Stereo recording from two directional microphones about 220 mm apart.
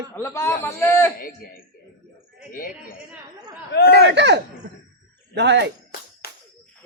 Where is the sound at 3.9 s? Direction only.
50° right (ahead or behind).